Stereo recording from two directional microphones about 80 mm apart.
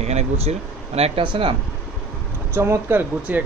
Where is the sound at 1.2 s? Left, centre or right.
Right.